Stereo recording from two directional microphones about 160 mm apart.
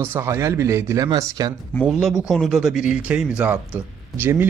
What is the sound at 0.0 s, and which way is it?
Speech, 15° right (ahead or behind).